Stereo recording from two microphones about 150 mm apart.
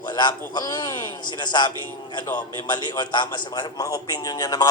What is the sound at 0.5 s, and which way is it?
A man's voice, 25° left (ahead or behind).